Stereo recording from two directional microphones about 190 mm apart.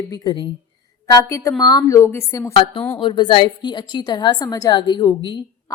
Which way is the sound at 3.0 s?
25° left (ahead or behind).